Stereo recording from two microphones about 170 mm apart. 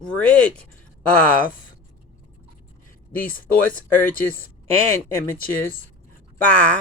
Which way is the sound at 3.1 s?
55° left (ahead or behind).